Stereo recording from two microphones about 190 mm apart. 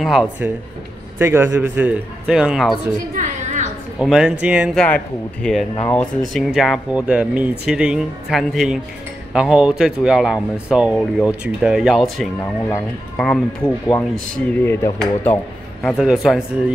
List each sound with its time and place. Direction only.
0.0 s a man's voice: centre (ahead or behind)
3.2 s a sound: 40° right (ahead or behind)
4.0 s speech: 5° right (ahead or behind)
6.3 s speech: centre (ahead or behind); by 15.4 s 15° left (ahead or behind)
16.0 s speech: centre (ahead or behind)